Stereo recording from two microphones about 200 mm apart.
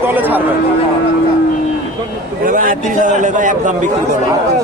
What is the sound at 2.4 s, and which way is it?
A man's voice, 45° right (ahead or behind).